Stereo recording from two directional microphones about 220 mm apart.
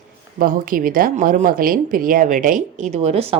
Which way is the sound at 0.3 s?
40° right (ahead or behind).